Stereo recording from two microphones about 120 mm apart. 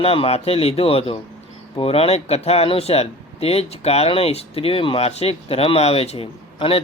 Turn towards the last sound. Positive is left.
turn(degrees=50)  # may be behind; listen again after turning